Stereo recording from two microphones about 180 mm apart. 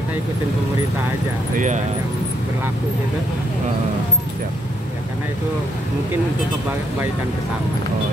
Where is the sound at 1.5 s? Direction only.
45° right (ahead or behind).